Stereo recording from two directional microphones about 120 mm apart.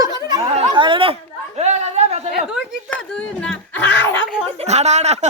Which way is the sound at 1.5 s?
70° right (ahead or behind).